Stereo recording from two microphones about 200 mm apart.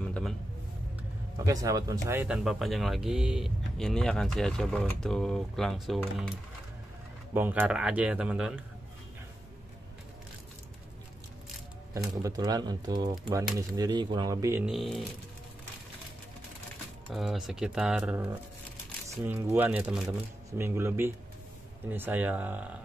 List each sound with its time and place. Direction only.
0.0 s a sound: 5° left (ahead or behind)
0.9 s speech: 15° right (ahead or behind); by 6.3 s centre (ahead or behind)
7.3 s speech: 10° right (ahead or behind)
12.2 s speech: 20° right (ahead or behind)
14.7 s speech: centre (ahead or behind)
17.1 s speech: centre (ahead or behind)
19.2 s speech: 10° right (ahead or behind)